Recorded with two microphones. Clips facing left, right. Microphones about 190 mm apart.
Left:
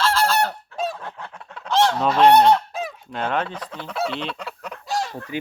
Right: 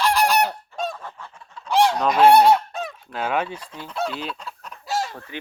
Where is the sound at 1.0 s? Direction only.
75° left (ahead or behind).